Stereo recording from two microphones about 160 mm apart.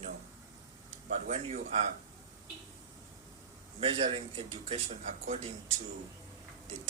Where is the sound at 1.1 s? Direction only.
50° right (ahead or behind).